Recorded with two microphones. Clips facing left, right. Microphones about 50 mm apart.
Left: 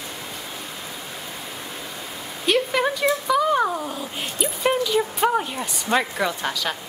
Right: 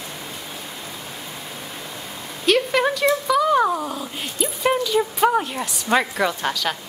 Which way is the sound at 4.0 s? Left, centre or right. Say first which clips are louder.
Right 1 dB; centre.